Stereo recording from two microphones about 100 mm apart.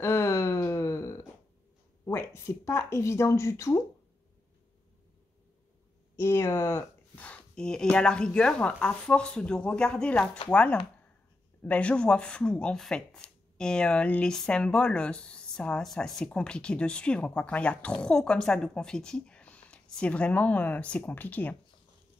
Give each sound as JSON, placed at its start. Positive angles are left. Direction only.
{"t": 0.0, "sound": "a sound", "side_deg": 25}
{"t": 2.0, "sound": "a woman's voice", "side_deg": 25}
{"t": 6.1, "sound": "speech", "side_deg": 25}
{"t": 7.2, "sound": "speech", "side_deg": 10}